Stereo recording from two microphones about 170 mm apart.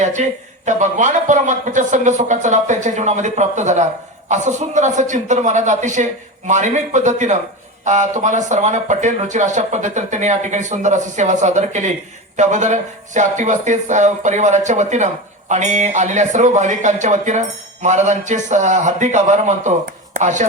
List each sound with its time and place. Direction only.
0.0 s a man's voice: 45° right (ahead or behind)